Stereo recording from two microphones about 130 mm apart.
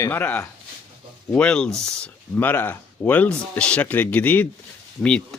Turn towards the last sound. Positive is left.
turn(degrees=5)  # may be behind; listen again after turning